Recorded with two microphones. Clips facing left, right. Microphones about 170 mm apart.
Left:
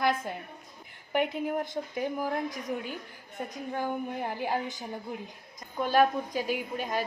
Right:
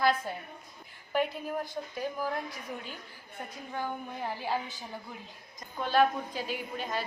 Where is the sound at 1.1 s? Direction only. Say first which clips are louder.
Left 2 dB; 20° left (ahead or behind).